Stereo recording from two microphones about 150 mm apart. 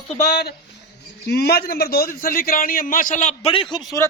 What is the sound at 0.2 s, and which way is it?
A man's voice, 90° left.